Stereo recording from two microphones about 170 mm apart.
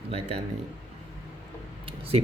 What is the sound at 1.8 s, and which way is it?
Speech, 35° right (ahead or behind).